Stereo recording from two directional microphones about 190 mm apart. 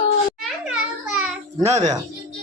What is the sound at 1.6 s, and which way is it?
Speech, 35° right (ahead or behind).